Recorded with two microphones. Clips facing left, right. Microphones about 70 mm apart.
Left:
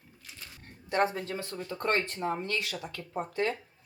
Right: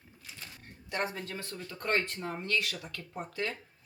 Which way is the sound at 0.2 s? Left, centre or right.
Centre.